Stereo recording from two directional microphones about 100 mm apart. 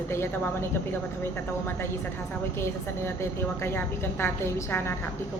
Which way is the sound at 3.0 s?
25° left (ahead or behind).